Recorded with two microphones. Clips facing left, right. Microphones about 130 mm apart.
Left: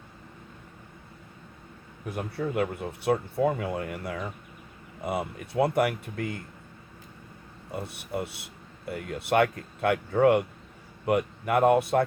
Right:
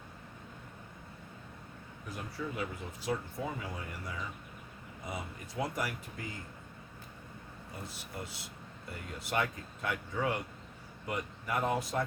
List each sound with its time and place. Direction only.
2.0 s speech: 60° left (ahead or behind)
7.7 s speech: 65° left (ahead or behind)